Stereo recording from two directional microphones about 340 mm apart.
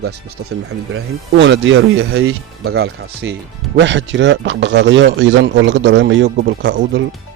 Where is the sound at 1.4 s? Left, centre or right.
Right.